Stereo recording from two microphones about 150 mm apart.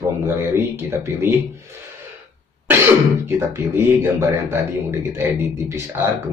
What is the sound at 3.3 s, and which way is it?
Speech, 15° right (ahead or behind).